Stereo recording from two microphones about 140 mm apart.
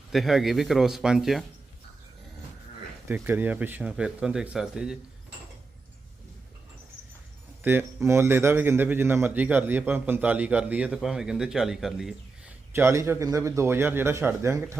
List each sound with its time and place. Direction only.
0.1 s speech: centre (ahead or behind)
3.1 s a man's voice: 15° right (ahead or behind)
7.6 s a man's voice: 15° right (ahead or behind)
12.7 s a man's voice: 20° right (ahead or behind)